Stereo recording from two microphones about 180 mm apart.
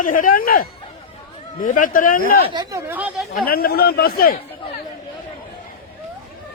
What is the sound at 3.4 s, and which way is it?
Speech, 55° left (ahead or behind).